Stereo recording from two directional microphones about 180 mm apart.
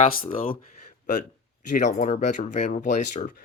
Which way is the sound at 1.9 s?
45° left (ahead or behind).